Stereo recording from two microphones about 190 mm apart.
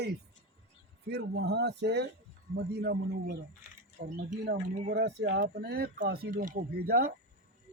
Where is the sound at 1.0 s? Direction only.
60° right (ahead or behind).